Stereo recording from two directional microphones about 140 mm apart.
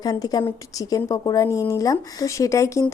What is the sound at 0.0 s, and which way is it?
Speech, 25° left (ahead or behind).